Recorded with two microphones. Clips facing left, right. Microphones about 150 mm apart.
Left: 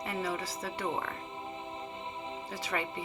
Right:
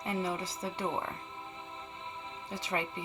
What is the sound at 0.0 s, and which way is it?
Speech, 20° right (ahead or behind).